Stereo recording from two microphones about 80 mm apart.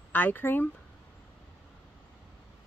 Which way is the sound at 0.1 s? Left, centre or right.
Left.